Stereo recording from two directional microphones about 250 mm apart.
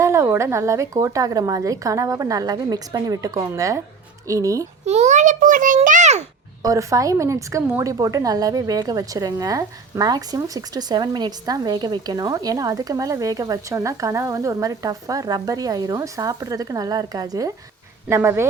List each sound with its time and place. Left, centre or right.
0.0 s a woman's voice: centre
4.9 s a child's voice: right
6.6 s a woman's voice: centre